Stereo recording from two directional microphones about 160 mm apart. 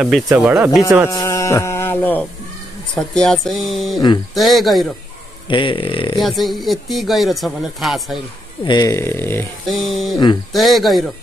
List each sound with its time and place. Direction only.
0.4 s speech: 10° right (ahead or behind)
1.1 s a sound: 20° left (ahead or behind)
3.0 s speech: 5° left (ahead or behind)
5.5 s speech: 30° left (ahead or behind)
6.1 s speech: centre (ahead or behind)
8.6 s speech: 25° left (ahead or behind)
9.7 s speech: centre (ahead or behind)